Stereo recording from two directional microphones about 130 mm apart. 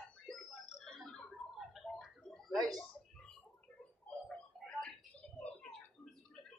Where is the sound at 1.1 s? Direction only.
Centre (ahead or behind).